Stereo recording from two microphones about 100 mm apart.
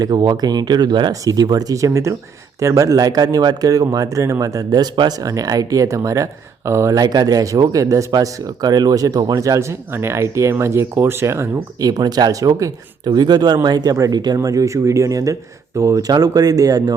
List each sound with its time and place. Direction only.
0.0 s speech: 40° right (ahead or behind)
11.9 s speech: 40° right (ahead or behind)